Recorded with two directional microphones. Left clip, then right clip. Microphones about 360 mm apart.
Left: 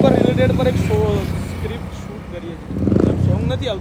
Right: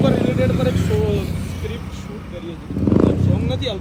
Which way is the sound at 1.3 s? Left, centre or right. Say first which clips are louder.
Left 2 dB; centre.